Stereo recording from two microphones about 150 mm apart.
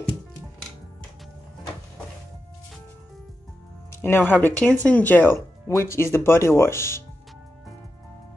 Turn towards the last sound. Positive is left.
turn(degrees=15)  # may be behind; listen again after turning